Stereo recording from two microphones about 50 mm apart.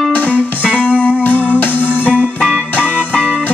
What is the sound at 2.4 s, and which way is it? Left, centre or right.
Music, centre.